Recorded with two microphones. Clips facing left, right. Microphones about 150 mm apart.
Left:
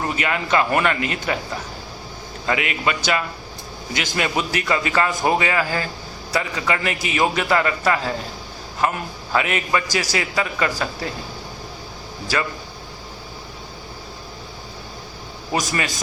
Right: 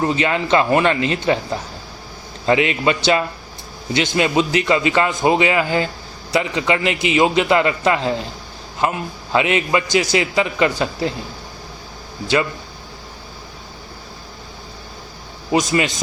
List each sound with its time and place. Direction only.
0.0 s a man's voice: 25° right (ahead or behind)
2.5 s a man's voice: 30° right (ahead or behind)
9.3 s a man's voice: 20° right (ahead or behind)
15.5 s a man's voice: 20° right (ahead or behind)